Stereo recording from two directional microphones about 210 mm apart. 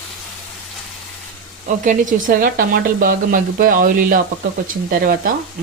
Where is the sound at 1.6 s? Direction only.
40° right (ahead or behind).